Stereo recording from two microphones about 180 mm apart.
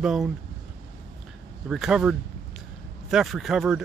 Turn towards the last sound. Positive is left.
turn(degrees=0)  # may be behind; listen again after turning